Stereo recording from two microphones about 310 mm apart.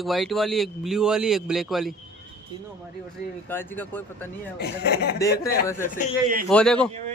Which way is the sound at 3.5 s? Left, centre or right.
Centre.